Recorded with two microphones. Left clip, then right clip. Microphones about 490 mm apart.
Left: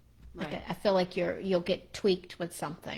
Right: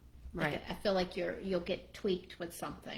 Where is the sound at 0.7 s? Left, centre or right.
Left.